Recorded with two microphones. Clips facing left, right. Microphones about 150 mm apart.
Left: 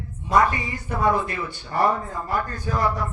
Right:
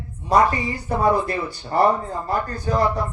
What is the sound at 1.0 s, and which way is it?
Speech, 35° right (ahead or behind).